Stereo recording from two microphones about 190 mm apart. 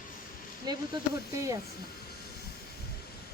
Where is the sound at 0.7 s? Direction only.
20° right (ahead or behind).